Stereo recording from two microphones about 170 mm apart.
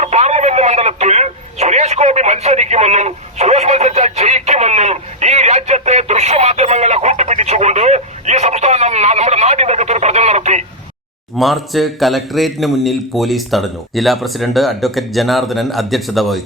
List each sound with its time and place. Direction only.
0.0 s speech: 40° right (ahead or behind)
11.3 s speech: centre (ahead or behind)